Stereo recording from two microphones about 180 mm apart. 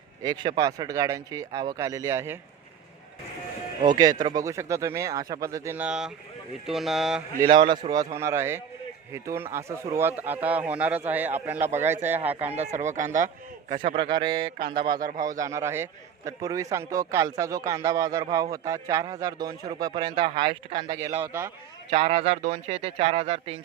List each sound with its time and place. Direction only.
0.2 s a man's voice: 20° right (ahead or behind)
4.2 s a man's voice: 20° right (ahead or behind); by 7.2 s centre (ahead or behind)
7.4 s a man's voice: 25° right (ahead or behind); by 12.5 s 10° right (ahead or behind)
12.5 s speech: 40° right (ahead or behind)
13.9 s a man's voice: 25° right (ahead or behind)
14.9 s speech: 50° right (ahead or behind)
15.2 s a man's voice: 20° right (ahead or behind)